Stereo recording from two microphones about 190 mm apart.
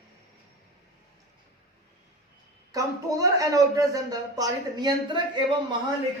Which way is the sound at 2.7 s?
20° right (ahead or behind).